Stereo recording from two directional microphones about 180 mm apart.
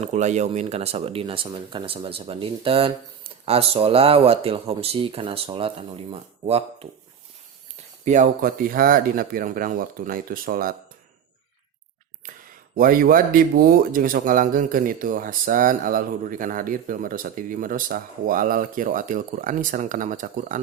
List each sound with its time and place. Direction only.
0.0 s speech: 40° right (ahead or behind)
8.0 s speech: 45° right (ahead or behind)
12.7 s speech: 50° right (ahead or behind)